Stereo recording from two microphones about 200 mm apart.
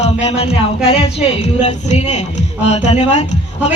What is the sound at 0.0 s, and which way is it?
A man's voice, 30° left (ahead or behind).